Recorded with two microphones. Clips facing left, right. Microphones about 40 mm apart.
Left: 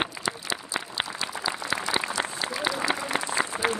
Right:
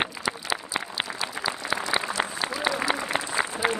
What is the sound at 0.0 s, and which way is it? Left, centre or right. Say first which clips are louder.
Applause: right 1 dB; centre.